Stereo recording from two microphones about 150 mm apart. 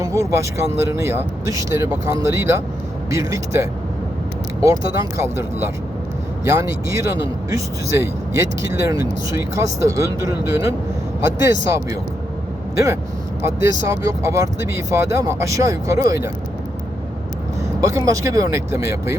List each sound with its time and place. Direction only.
0.0 s speech: 20° right (ahead or behind)
17.7 s speech: 20° right (ahead or behind)